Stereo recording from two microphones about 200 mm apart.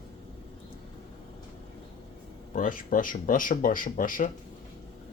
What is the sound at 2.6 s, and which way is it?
Speech, 40° left (ahead or behind).